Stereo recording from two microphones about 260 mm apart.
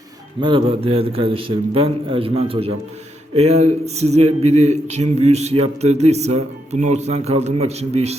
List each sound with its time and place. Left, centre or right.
0.4 s speech: centre